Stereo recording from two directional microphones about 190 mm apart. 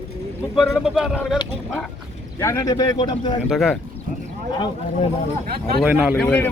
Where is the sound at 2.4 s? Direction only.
15° left (ahead or behind).